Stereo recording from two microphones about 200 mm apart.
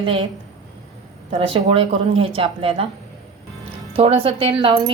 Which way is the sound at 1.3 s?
25° right (ahead or behind).